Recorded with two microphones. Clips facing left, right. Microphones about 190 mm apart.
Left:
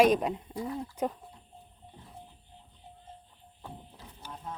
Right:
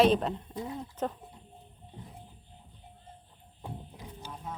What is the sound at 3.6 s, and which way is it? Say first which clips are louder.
Music: right 3 dB; 15° right (ahead or behind).